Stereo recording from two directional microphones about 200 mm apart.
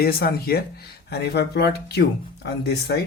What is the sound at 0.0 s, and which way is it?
Speech, 50° left (ahead or behind).